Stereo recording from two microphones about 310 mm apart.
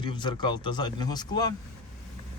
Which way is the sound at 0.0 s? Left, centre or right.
Centre.